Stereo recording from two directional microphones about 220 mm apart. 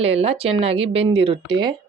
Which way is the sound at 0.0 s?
25° right (ahead or behind).